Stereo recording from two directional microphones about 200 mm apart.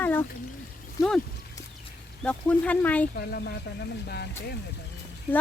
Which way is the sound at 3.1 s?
55° left (ahead or behind).